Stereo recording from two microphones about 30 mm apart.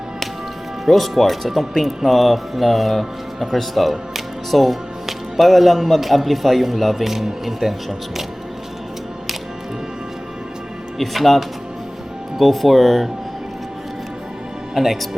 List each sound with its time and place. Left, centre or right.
0.9 s speech: centre
10.9 s speech: centre
12.4 s speech: centre
14.8 s speech: centre